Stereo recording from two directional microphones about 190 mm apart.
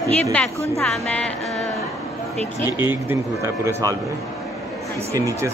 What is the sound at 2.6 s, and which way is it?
A man's voice, 10° right (ahead or behind).